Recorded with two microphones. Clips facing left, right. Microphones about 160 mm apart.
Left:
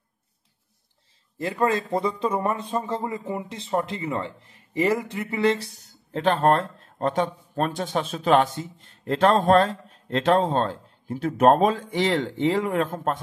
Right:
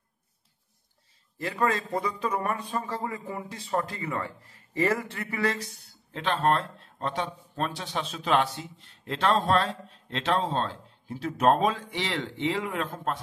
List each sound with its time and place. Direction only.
1.4 s a man's voice: 25° left (ahead or behind)
6.1 s speech: 45° left (ahead or behind)